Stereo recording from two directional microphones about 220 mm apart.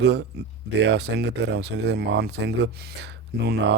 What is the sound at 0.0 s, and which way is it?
Speech, 50° right (ahead or behind).